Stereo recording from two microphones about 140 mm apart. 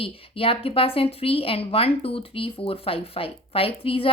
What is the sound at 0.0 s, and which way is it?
A woman's voice, 40° left (ahead or behind).